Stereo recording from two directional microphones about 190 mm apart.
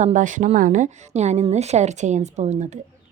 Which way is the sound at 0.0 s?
40° right (ahead or behind).